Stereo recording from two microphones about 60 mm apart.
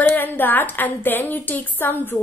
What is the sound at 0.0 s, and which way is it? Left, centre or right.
A woman's voice, left.